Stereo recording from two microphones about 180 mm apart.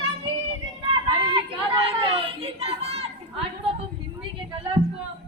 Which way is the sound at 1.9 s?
30° right (ahead or behind).